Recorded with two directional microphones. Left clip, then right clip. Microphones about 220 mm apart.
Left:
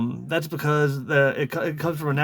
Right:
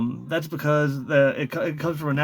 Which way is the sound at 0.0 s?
25° left (ahead or behind).